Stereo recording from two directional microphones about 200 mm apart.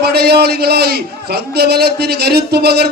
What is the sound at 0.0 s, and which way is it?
Speech, 55° right (ahead or behind).